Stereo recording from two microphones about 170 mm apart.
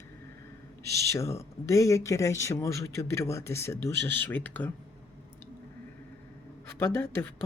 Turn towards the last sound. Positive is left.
turn(degrees=15)  # may be behind; listen again after turning